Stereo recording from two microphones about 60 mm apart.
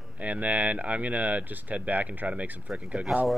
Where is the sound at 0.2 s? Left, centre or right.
Right.